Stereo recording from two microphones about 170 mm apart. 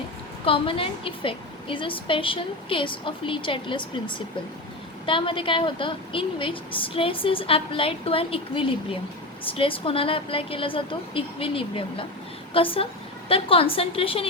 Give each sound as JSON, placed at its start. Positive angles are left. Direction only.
{"t": 0.4, "sound": "a woman's voice", "side_deg": 30}